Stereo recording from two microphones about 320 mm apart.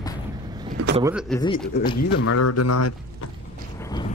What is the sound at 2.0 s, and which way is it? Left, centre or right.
Speech, left.